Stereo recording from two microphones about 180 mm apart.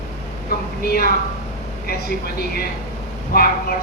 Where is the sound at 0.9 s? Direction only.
55° left (ahead or behind).